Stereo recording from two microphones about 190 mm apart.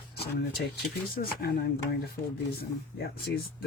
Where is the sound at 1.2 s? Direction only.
50° left (ahead or behind).